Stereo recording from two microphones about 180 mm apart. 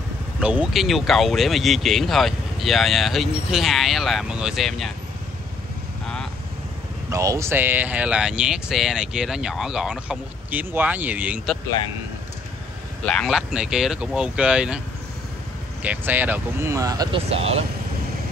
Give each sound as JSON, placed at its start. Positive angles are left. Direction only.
{"t": 0.4, "sound": "speech", "side_deg": -5}
{"t": 7.1, "sound": "speech", "side_deg": -15}
{"t": 13.0, "sound": "speech", "side_deg": 5}
{"t": 15.8, "sound": "speech", "side_deg": -10}
{"t": 17.3, "sound": "speech", "side_deg": -35}